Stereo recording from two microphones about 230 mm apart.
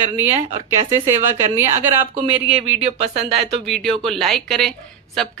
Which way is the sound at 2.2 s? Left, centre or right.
Right.